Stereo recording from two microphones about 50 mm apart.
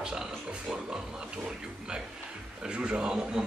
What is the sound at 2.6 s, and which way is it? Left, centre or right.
Speech, centre.